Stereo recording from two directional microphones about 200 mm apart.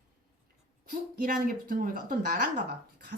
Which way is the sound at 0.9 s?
45° right (ahead or behind).